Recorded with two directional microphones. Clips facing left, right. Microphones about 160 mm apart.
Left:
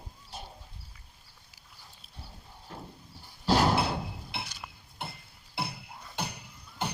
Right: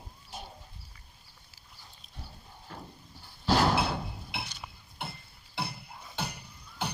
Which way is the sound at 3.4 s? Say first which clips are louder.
Left 1 dB; 10° left (ahead or behind).